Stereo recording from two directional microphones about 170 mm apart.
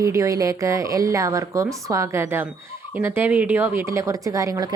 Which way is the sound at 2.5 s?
15° right (ahead or behind).